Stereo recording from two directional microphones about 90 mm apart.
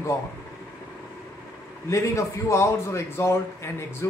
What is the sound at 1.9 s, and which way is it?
A man's voice, 35° left (ahead or behind).